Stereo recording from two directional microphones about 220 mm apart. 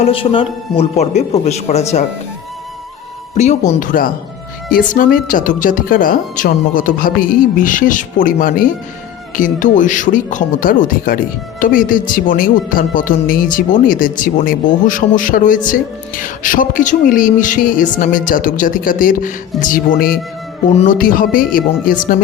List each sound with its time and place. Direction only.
0.0 s a man's voice: 25° left (ahead or behind)
3.3 s speech: 30° left (ahead or behind)